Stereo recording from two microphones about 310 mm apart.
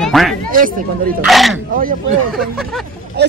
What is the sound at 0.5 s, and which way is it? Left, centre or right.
Speech, right.